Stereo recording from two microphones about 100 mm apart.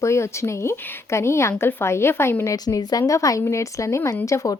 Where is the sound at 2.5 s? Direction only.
40° left (ahead or behind).